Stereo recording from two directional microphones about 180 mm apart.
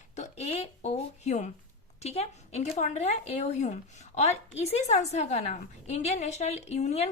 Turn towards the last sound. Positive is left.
turn(degrees=40)  # may be behind; listen again after turning